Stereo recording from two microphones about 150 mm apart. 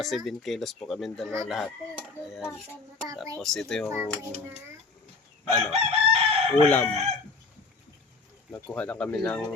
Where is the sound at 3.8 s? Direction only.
20° right (ahead or behind).